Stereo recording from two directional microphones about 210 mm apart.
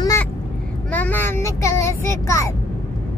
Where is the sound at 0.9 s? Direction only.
10° left (ahead or behind).